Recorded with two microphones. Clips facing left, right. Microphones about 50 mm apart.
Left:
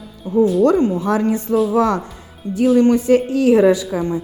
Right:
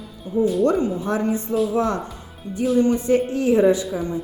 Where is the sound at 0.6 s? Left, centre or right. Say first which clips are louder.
Left 5 dB; left.